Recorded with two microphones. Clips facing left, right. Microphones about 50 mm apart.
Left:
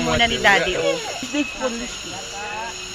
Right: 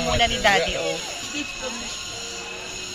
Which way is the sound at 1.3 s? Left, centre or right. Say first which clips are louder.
Left 9 dB; left.